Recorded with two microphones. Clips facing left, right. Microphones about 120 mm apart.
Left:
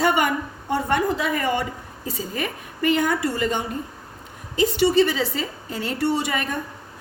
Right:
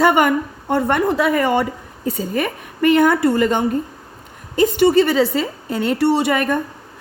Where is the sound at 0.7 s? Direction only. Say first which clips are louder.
Right 4 dB; 60° right (ahead or behind).